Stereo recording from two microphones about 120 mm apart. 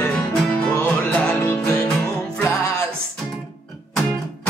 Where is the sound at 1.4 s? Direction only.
20° left (ahead or behind).